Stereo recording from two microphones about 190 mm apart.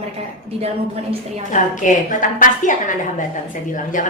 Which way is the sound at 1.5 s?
40° left (ahead or behind).